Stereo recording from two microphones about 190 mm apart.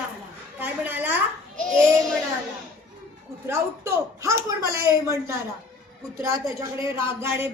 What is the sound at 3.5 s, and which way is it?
Speech, 15° right (ahead or behind).